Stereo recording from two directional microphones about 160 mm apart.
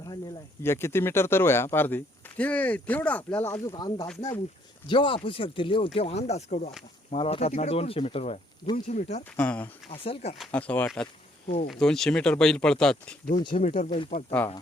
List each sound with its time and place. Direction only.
0.6 s speech: 15° left (ahead or behind)
3.7 s speech: 25° left (ahead or behind); by 9.2 s 45° left (ahead or behind)
9.3 s speech: 10° left (ahead or behind)
9.9 s speech: 35° left (ahead or behind)
10.3 s speech: 5° left (ahead or behind)
13.5 s speech: 50° left (ahead or behind)
14.3 s speech: 15° left (ahead or behind)